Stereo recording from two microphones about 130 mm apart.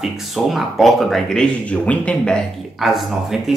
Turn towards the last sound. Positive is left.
turn(degrees=0)  # may be behind; listen again after turning